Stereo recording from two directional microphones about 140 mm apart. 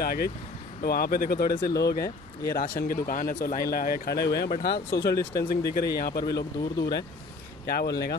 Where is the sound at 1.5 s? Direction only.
25° left (ahead or behind).